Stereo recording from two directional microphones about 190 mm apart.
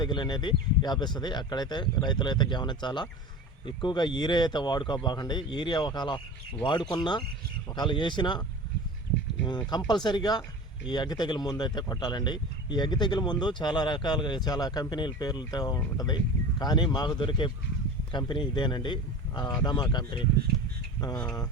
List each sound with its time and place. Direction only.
0.0 s speech: 25° left (ahead or behind)
9.5 s speech: 20° left (ahead or behind)